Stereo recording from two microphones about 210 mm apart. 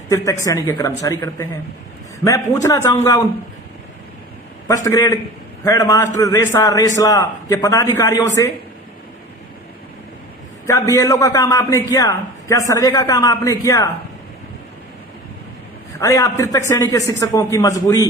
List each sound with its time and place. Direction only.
0.1 s a man's voice: 15° left (ahead or behind)
4.7 s a man's voice: 15° left (ahead or behind)
10.7 s a man's voice: 15° left (ahead or behind)
16.0 s a man's voice: 15° left (ahead or behind)